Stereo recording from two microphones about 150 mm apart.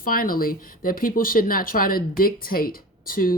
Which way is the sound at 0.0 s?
70° left (ahead or behind).